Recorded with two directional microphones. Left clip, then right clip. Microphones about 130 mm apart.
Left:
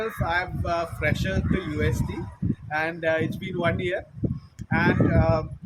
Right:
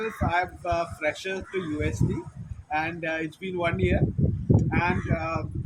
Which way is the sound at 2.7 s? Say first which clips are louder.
Left 3 dB; 30° left (ahead or behind).